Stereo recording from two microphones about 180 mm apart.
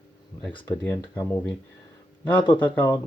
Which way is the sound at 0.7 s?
10° left (ahead or behind).